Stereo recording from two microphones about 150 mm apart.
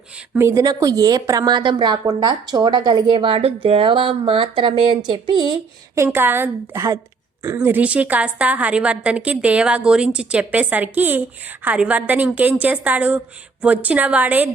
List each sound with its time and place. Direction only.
0.3 s a woman's voice: 20° right (ahead or behind)
5.9 s a woman's voice: 15° right (ahead or behind)